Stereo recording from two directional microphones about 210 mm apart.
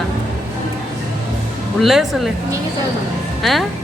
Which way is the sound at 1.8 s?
Centre (ahead or behind).